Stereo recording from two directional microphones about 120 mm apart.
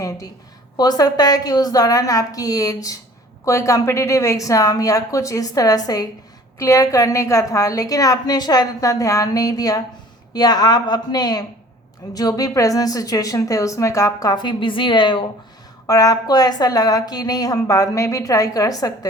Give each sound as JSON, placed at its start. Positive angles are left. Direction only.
{"t": 0.8, "sound": "a woman's voice", "side_deg": 35}